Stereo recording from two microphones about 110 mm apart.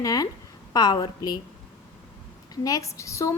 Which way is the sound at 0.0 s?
35° left (ahead or behind).